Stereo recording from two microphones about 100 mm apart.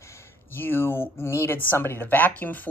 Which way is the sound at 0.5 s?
20° left (ahead or behind).